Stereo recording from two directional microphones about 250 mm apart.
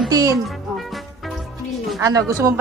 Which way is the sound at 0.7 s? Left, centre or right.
Centre.